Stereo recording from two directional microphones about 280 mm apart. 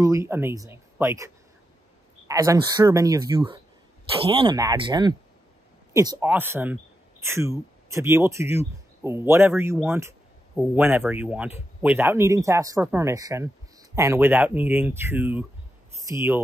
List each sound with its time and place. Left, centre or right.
0.0 s speech: centre